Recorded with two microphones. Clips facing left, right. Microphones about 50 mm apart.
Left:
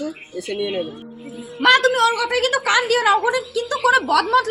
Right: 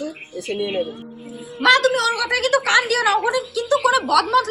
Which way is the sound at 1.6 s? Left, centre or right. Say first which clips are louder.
Left 1 dB; left.